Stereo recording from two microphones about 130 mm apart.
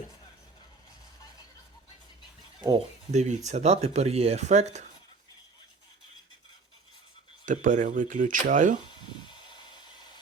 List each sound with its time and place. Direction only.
3.1 s speech: 65° right (ahead or behind)
7.4 s speech: 85° right
9.7 s a sound: 35° left (ahead or behind)